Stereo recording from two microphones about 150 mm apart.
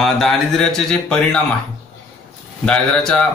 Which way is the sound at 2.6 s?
5° left (ahead or behind).